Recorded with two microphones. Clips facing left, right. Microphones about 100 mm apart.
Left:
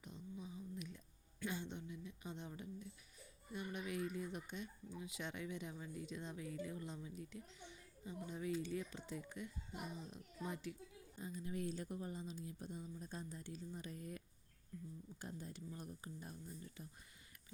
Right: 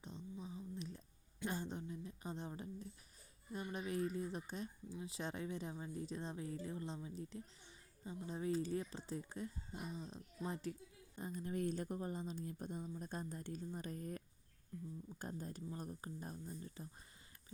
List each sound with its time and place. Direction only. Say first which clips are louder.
0.0 s a sound: right 2 dB; 30° right (ahead or behind)
3.5 s speech: right 2 dB; 35° right (ahead or behind)
11.2 s a woman's voice: right 3 dB; 50° right (ahead or behind)
15.2 s speech: right 3 dB; 45° right (ahead or behind)